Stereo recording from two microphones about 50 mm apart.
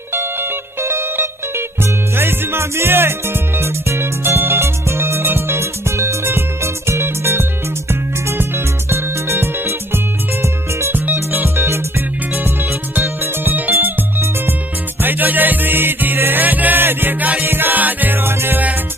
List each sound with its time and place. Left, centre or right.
0.1 s music: right
11.3 s music: right
12.4 s music: right